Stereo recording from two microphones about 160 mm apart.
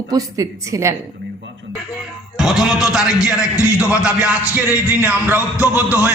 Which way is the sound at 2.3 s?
Centre (ahead or behind).